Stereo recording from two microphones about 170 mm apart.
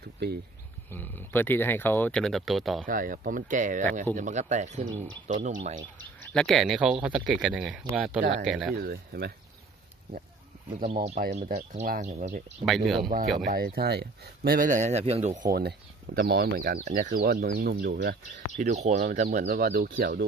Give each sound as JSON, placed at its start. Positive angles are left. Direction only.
{"t": 0.9, "sound": "speech", "side_deg": 10}
{"t": 2.8, "sound": "speech", "side_deg": -55}
{"t": 6.3, "sound": "speech", "side_deg": 0}
{"t": 8.7, "sound": "speech", "side_deg": -65}
{"t": 10.9, "sound": "speech", "side_deg": -50}
{"t": 12.6, "sound": "speech", "side_deg": 0}
{"t": 13.5, "sound": "speech", "side_deg": -60}
{"t": 16.8, "sound": "speech", "side_deg": -50}
{"t": 17.2, "sound": "speech", "side_deg": -65}
{"t": 18.8, "sound": "speech", "side_deg": -45}